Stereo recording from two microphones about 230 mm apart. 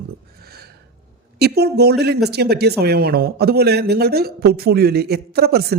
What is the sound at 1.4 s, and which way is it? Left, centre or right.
Speech, right.